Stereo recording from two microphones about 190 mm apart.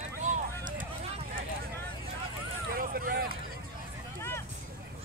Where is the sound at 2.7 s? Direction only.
50° right (ahead or behind).